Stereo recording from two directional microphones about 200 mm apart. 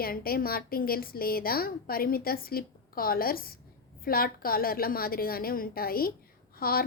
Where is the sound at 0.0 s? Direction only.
50° left (ahead or behind).